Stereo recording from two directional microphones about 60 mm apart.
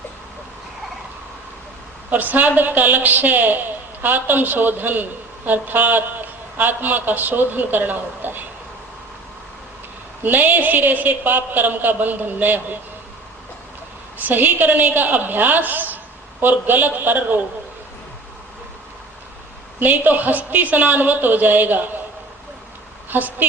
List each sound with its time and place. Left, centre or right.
2.0 s a woman's voice: right
10.2 s a woman's voice: right
14.3 s a woman's voice: right
19.8 s a woman's voice: right
23.0 s a woman's voice: right